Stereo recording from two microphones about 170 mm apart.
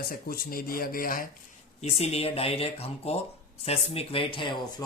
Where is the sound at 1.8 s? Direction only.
40° left (ahead or behind).